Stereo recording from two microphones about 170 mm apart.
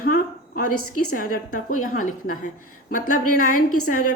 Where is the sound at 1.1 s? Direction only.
55° left (ahead or behind).